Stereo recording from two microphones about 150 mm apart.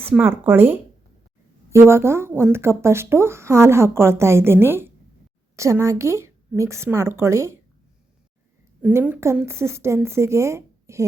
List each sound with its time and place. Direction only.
0.1 s a woman's voice: 15° right (ahead or behind)
8.8 s speech: 15° right (ahead or behind)